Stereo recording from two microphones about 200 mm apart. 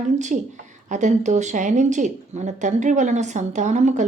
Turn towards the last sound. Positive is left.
turn(degrees=-35)  # may be behind; listen again after turning